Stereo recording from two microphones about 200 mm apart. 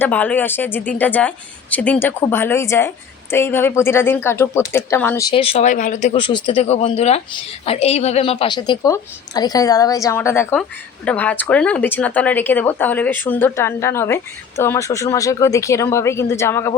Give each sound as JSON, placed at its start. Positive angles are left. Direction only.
{"t": 0.0, "sound": "a woman's voice", "side_deg": 10}
{"t": 5.3, "sound": "a woman's voice", "side_deg": 30}